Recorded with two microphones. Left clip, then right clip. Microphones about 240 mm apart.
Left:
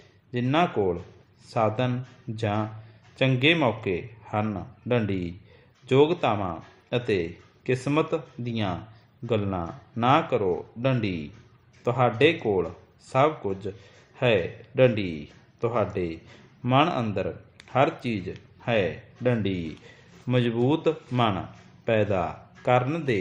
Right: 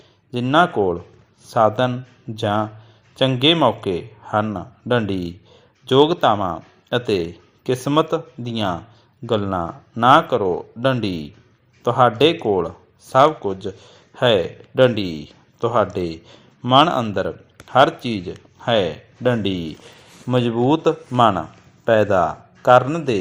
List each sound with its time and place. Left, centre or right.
0.3 s a man's voice: right